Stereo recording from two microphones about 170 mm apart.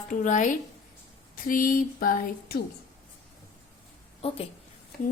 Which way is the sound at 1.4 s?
55° left (ahead or behind).